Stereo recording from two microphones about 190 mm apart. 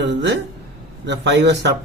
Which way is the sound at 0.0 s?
70° right (ahead or behind).